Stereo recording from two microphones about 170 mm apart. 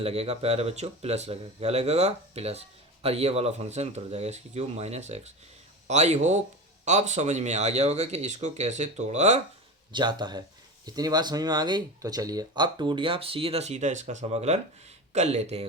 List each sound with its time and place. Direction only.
0.0 s speech: 35° right (ahead or behind)
9.9 s speech: 25° right (ahead or behind)